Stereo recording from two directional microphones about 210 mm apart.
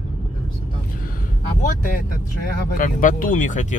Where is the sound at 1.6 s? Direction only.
40° left (ahead or behind).